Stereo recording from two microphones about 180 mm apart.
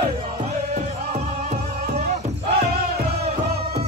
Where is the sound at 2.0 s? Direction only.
60° right (ahead or behind).